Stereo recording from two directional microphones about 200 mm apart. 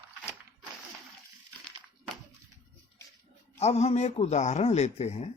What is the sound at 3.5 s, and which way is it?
Speech, 30° left (ahead or behind).